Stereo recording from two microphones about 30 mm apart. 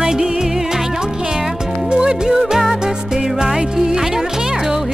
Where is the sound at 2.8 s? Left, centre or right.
Right.